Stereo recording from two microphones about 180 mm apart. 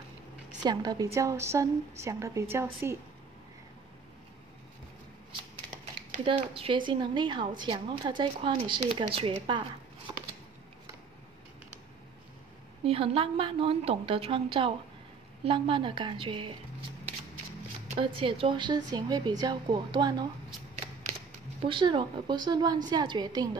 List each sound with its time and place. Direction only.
0.7 s a woman's voice: 20° right (ahead or behind)
6.2 s a woman's voice: 30° right (ahead or behind)
12.8 s a woman's voice: 35° right (ahead or behind)
17.8 s a woman's voice: 30° right (ahead or behind)
21.5 s a woman's voice: 30° right (ahead or behind)